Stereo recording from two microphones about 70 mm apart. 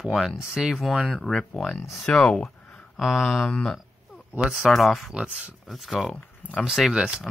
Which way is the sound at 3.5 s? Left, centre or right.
Centre.